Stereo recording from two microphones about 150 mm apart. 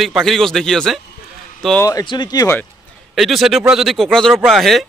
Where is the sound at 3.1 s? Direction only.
Centre (ahead or behind).